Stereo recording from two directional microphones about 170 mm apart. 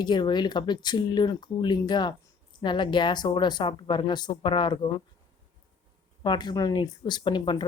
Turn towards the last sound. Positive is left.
turn(degrees=25)  # may be behind; listen again after turning